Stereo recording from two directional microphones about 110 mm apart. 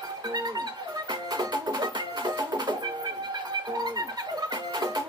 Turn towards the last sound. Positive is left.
turn(degrees=-35)  # may be behind; listen again after turning